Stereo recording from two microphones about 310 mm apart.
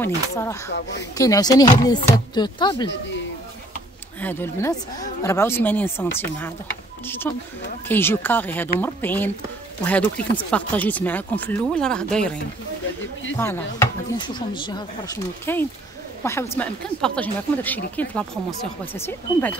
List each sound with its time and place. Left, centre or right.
0.0 s speech: centre
4.2 s speech: centre
7.1 s speech: centre
13.4 s speech: centre